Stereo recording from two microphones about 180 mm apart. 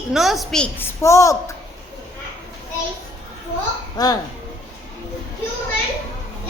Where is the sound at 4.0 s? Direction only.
20° left (ahead or behind).